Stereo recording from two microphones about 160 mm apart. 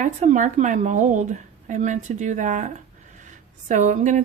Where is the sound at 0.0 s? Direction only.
50° right (ahead or behind).